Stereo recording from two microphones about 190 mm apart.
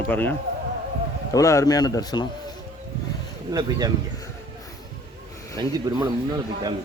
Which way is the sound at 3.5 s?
20° right (ahead or behind).